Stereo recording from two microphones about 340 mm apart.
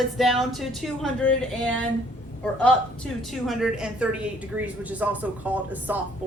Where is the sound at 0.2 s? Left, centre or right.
Centre.